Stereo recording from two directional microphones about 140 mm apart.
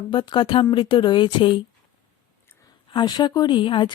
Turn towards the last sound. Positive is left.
turn(degrees=35)  # may be behind; listen again after turning